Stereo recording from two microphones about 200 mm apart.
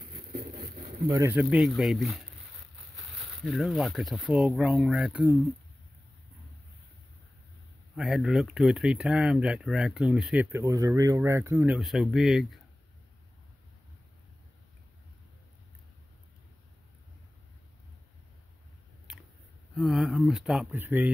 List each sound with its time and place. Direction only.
0.1 s a sound: 50° right (ahead or behind)
0.7 s speech: 20° right (ahead or behind); by 2.2 s centre (ahead or behind)
3.4 s speech: centre (ahead or behind)
7.9 s speech: centre (ahead or behind)
19.7 s speech: centre (ahead or behind)